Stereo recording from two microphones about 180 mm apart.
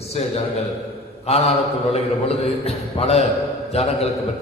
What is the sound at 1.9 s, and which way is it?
A man's voice, 35° left (ahead or behind).